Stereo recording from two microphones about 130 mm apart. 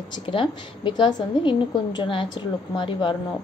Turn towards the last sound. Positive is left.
turn(degrees=40)  # may be behind; listen again after turning